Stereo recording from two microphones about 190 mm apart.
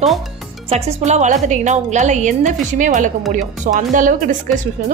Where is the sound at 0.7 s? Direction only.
35° right (ahead or behind).